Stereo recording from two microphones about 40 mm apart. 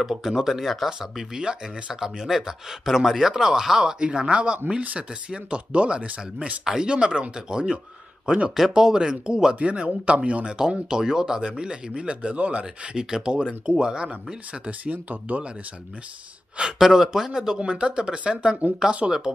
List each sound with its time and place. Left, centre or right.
0.0 s speech: centre
1.1 s speech: centre
4.0 s speech: right
6.6 s speech: centre
9.6 s speech: right
10.9 s speech: centre; by 12.6 s right
12.9 s speech: centre
14.7 s speech: right
16.7 s speech: centre
17.6 s speech: right